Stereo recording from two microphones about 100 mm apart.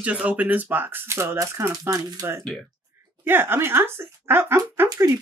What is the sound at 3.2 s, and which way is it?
Speech, 20° right (ahead or behind).